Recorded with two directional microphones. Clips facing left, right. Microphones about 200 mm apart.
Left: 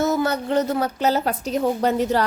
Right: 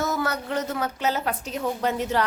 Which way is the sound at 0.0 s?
25° left (ahead or behind).